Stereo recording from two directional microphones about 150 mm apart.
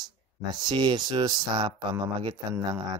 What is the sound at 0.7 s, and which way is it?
Speech, 30° right (ahead or behind).